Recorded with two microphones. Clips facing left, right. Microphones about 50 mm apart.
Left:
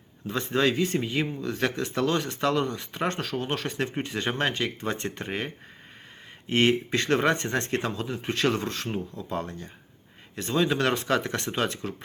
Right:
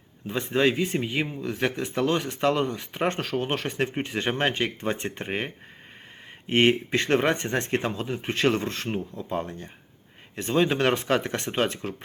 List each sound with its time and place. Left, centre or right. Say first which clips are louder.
0.3 s speech: right 1 dB; right
6.5 s speech: right 2 dB; right